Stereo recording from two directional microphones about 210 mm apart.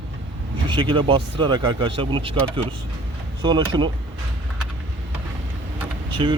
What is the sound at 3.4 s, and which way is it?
Speech, 20° right (ahead or behind).